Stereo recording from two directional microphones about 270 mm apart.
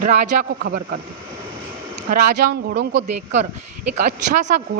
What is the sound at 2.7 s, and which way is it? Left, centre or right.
Speech, right.